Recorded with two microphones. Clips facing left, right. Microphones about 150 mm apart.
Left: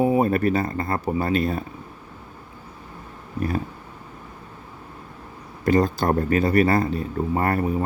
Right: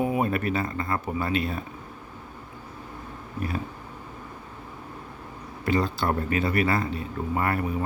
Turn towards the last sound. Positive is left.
turn(degrees=40)  # may be behind; listen again after turning